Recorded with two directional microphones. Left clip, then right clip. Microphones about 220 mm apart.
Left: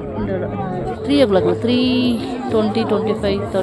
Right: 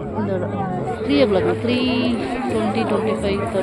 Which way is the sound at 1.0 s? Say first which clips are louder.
Left 3 dB; 10° left (ahead or behind).